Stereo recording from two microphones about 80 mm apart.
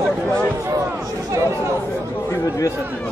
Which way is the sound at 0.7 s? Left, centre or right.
Right.